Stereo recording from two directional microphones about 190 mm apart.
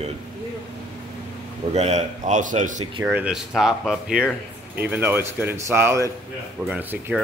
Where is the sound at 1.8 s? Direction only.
35° right (ahead or behind).